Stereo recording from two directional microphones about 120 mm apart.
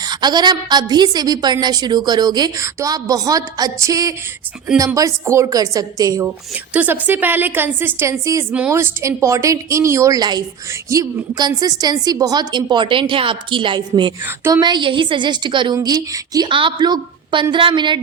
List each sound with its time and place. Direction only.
0.0 s a woman's voice: 35° right (ahead or behind)
6.7 s a woman's voice: 15° right (ahead or behind); by 18.0 s 40° right (ahead or behind)